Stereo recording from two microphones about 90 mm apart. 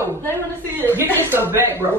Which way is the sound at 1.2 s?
25° right (ahead or behind).